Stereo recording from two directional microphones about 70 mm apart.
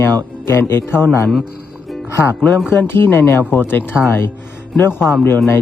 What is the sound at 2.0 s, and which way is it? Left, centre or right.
Speech, left.